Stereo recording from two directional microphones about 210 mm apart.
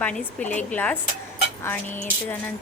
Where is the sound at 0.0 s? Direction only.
5° left (ahead or behind).